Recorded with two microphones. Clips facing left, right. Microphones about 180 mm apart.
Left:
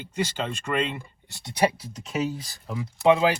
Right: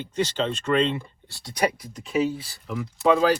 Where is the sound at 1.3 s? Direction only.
20° left (ahead or behind).